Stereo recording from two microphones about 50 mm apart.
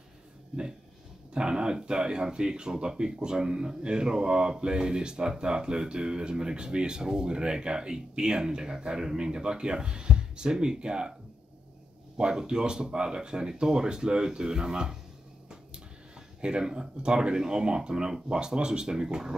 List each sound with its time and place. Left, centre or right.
1.3 s speech: centre
12.2 s speech: centre
16.3 s speech: centre